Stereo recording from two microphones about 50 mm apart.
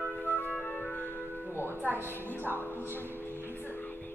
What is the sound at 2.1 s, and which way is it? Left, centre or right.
Speech, left.